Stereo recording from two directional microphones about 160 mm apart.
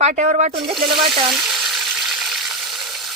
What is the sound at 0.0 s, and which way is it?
Speech, 45° right (ahead or behind).